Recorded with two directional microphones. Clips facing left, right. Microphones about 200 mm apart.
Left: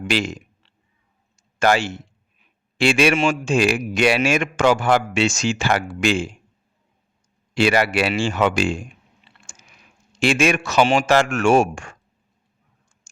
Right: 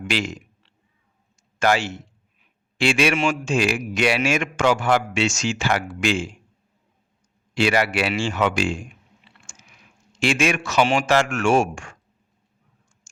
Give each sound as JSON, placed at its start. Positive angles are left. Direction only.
{"t": 0.1, "sound": "a man's voice", "side_deg": 30}
{"t": 1.5, "sound": "a man's voice", "side_deg": 35}
{"t": 7.8, "sound": "a man's voice", "side_deg": 35}
{"t": 10.2, "sound": "a man's voice", "side_deg": 35}